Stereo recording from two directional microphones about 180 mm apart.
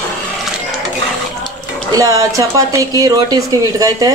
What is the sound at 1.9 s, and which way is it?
Speech, 20° right (ahead or behind).